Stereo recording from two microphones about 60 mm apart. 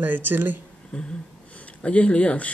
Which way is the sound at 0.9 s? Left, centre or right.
Centre.